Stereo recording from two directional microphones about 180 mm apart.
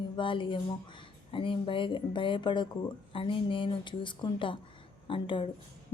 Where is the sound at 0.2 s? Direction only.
25° left (ahead or behind).